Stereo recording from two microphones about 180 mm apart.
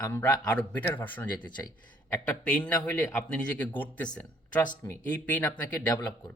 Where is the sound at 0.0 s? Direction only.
20° left (ahead or behind).